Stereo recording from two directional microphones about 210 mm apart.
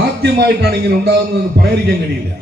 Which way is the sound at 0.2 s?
50° right (ahead or behind).